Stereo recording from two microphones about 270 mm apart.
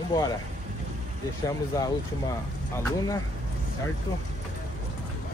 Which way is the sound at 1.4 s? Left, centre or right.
Centre.